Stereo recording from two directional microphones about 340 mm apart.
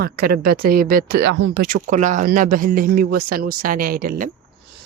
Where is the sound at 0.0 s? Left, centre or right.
Right.